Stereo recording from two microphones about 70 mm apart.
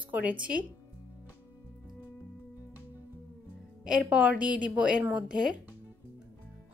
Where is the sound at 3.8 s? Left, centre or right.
Centre.